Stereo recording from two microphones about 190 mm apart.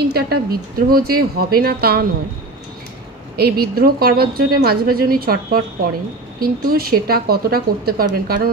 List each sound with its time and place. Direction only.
0.1 s a woman's voice: 55° right (ahead or behind)
3.3 s a woman's voice: 55° right (ahead or behind)